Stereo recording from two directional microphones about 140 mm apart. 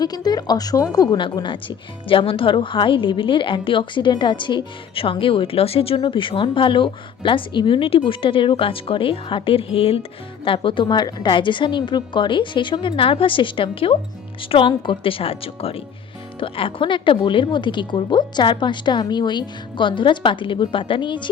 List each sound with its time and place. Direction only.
0.0 s a woman's voice: 30° left (ahead or behind)